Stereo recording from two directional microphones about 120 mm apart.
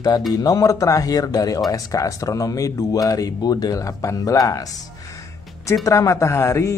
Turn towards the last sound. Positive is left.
turn(degrees=25)  # may be behind; listen again after turning